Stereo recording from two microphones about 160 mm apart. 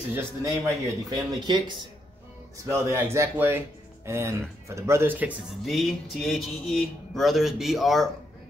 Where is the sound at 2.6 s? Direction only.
15° right (ahead or behind).